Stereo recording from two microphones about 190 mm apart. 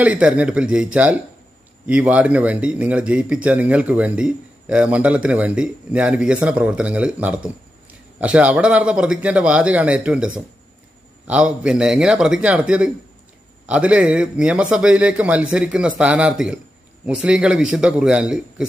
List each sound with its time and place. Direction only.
0.0 s a man's voice: 5° right (ahead or behind)